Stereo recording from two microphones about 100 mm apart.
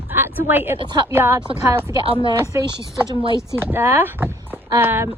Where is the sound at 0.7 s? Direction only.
50° right (ahead or behind).